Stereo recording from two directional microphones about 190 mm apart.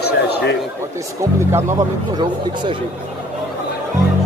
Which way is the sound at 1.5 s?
15° right (ahead or behind).